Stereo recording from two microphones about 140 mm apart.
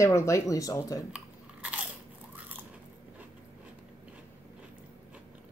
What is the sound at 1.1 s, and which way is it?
Biting, 10° right (ahead or behind).